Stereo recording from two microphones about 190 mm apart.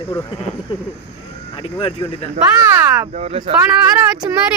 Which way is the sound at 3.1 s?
35° right (ahead or behind).